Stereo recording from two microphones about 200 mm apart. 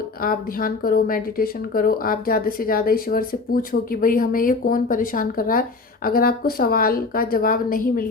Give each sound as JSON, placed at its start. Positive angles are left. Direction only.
{"t": 0.2, "sound": "speech", "side_deg": 45}